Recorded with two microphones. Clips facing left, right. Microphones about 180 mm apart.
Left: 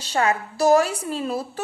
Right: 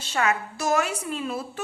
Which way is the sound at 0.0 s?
35° left (ahead or behind).